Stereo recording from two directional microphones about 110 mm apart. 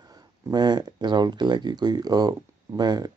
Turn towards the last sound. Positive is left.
turn(degrees=-35)  # may be behind; listen again after turning